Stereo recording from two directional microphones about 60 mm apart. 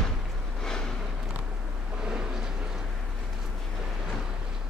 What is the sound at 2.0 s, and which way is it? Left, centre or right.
Vehicle, centre.